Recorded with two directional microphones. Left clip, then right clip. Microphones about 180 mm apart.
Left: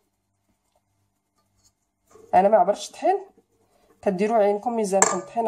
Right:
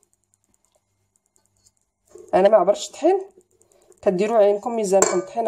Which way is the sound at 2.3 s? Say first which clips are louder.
Right 2 dB; 45° right (ahead or behind).